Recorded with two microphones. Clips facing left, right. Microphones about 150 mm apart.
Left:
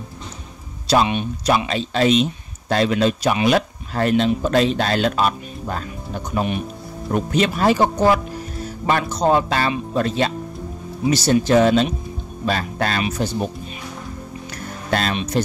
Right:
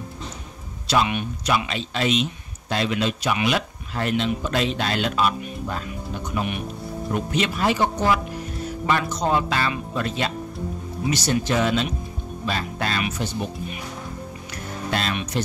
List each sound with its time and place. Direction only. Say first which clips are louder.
1.0 s speech: left 4 dB; 25° left (ahead or behind)
1.7 s speech: left 6 dB; 40° left (ahead or behind)
14.9 s speech: left 5 dB; 45° left (ahead or behind)